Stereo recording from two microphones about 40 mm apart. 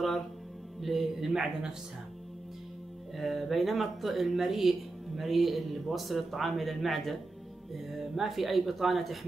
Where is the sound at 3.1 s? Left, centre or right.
Centre.